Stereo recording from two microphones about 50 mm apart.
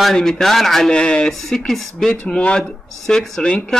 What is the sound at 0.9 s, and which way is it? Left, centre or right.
Speech, centre.